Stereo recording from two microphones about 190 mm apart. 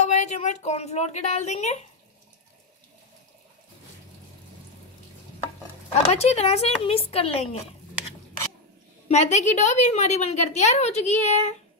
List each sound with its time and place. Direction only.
0.0 s speech: 35° left (ahead or behind)
6.0 s a woman's voice: 35° left (ahead or behind)
9.1 s a woman's voice: 35° left (ahead or behind)